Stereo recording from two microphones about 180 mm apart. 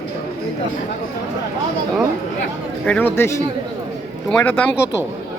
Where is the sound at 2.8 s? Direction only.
10° left (ahead or behind).